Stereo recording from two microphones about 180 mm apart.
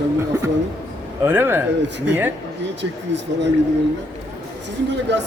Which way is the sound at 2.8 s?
80° right.